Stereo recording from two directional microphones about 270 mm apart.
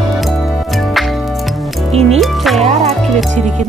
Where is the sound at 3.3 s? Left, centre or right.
Right.